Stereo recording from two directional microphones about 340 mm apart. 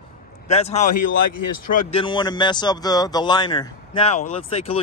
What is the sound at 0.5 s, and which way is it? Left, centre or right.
Speech, centre.